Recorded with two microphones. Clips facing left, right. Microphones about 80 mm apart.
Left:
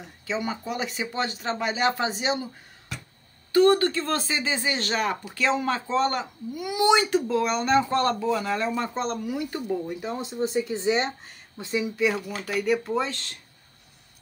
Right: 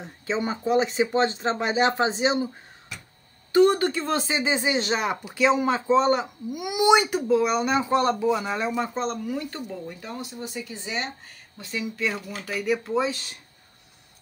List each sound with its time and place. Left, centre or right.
0.0 s speech: right
3.5 s speech: centre
8.9 s speech: centre; by 11.1 s left
11.5 s speech: left
12.4 s speech: centre